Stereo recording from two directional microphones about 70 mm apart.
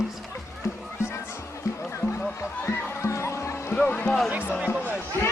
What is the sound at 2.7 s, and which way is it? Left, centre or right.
Music, left.